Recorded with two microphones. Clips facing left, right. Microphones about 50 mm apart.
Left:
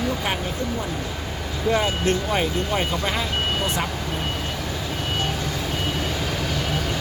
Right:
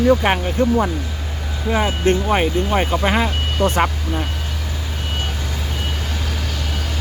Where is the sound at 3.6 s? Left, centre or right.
Right.